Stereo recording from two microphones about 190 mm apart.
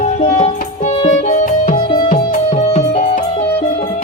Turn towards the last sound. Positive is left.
turn(degrees=40)  # may be behind; listen again after turning